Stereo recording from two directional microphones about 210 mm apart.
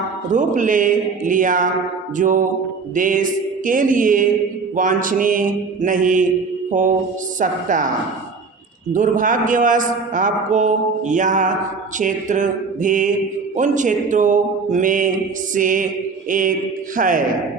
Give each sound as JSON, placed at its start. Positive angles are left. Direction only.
{"t": 0.3, "sound": "mantra", "side_deg": -40}
{"t": 7.3, "sound": "mantra", "side_deg": -40}
{"t": 8.9, "sound": "mantra", "side_deg": -40}